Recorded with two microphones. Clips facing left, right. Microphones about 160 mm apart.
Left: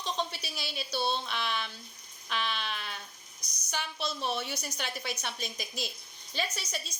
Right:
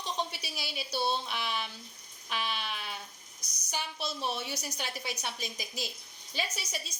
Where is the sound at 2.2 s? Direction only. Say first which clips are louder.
Left 1 dB; 10° right (ahead or behind).